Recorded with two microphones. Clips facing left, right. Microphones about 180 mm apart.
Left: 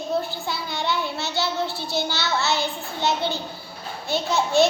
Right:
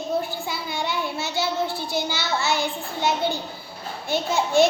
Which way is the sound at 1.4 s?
50° right (ahead or behind).